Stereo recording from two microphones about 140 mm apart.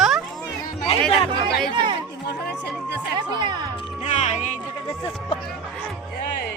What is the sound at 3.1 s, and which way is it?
Speech, 35° right (ahead or behind).